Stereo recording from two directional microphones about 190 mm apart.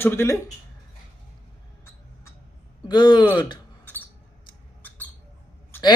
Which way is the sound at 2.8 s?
25° left (ahead or behind).